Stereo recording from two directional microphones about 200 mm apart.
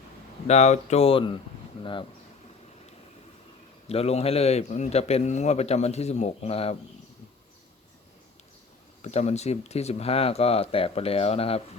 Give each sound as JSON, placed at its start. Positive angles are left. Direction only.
{"t": 0.4, "sound": "a man's voice", "side_deg": 35}
{"t": 3.8, "sound": "a man's voice", "side_deg": 30}
{"t": 9.0, "sound": "a man's voice", "side_deg": 35}